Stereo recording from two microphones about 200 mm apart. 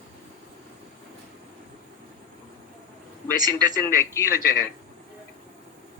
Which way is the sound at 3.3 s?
20° right (ahead or behind).